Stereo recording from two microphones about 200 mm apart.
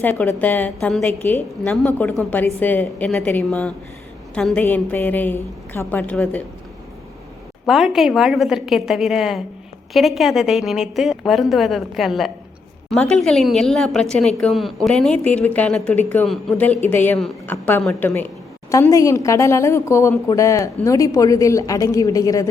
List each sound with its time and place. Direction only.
0.0 s a woman's voice: 10° left (ahead or behind)
7.7 s a woman's voice: centre (ahead or behind); by 22.4 s 15° left (ahead or behind)